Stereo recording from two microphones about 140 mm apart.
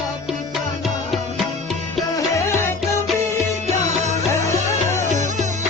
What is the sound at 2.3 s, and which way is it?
Music, 20° left (ahead or behind).